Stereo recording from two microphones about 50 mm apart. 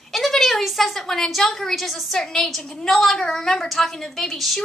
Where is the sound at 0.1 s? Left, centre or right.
Centre.